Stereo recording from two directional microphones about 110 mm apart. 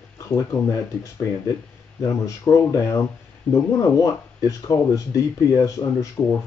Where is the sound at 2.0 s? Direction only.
30° left (ahead or behind).